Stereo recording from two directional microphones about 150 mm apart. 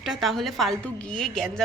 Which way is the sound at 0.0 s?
Centre (ahead or behind).